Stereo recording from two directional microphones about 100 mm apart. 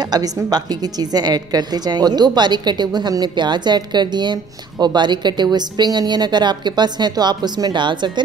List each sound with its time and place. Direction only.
0.1 s a woman's voice: 40° right (ahead or behind)